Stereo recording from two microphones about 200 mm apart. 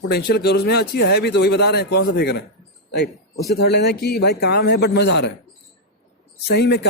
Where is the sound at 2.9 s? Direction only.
55° left (ahead or behind).